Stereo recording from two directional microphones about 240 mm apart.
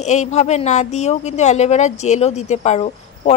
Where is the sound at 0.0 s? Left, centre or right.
Left.